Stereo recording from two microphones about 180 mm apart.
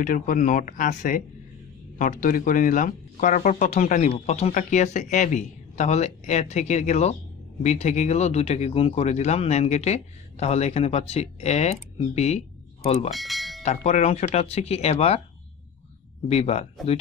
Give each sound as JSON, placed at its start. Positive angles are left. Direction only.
{"t": 0.0, "sound": "speech", "side_deg": 45}
{"t": 13.1, "sound": "bell", "side_deg": 0}
{"t": 13.6, "sound": "speech", "side_deg": 40}
{"t": 16.3, "sound": "speech", "side_deg": 35}